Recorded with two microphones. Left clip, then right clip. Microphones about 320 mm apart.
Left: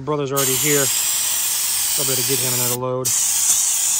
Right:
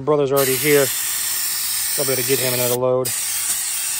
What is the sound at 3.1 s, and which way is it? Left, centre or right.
Spray, centre.